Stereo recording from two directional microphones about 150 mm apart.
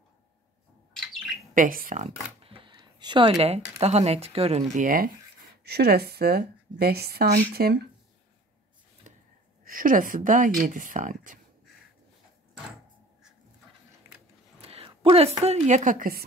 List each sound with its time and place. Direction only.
1.5 s speech: 65° right (ahead or behind)
2.4 s a sound: 35° right (ahead or behind)
3.3 s a woman's voice: 45° right (ahead or behind)
4.7 s speech: 70° right (ahead or behind)
5.6 s a woman's voice: 90° right
9.1 s a sound: 55° right (ahead or behind)
9.7 s speech: 65° right (ahead or behind)
14.0 s biting: 15° right (ahead or behind)
14.6 s a sound: 40° right (ahead or behind)
15.0 s a woman's voice: 40° right (ahead or behind); by 16.3 s 75° right (ahead or behind)